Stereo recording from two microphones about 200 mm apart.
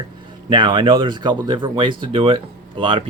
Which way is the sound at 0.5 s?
25° right (ahead or behind).